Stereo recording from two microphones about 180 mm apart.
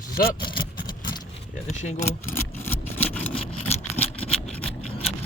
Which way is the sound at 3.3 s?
35° left (ahead or behind).